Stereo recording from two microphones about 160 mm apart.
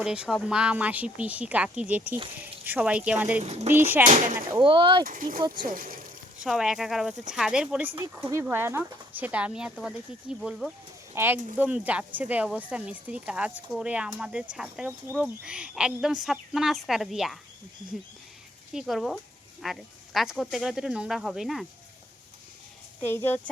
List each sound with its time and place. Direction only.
0.0 s speech: 5° right (ahead or behind)
4.6 s speech: 30° right (ahead or behind)
5.0 s speech: 60° right (ahead or behind)
6.4 s speech: 5° right (ahead or behind)
11.1 s speech: 15° right (ahead or behind)
18.7 s speech: centre (ahead or behind)
23.0 s speech: 15° left (ahead or behind)